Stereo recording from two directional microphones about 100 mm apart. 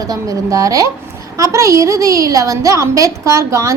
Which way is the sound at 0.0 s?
35° right (ahead or behind).